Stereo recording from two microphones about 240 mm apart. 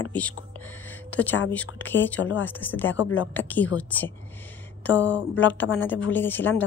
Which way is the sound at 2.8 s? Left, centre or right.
Left.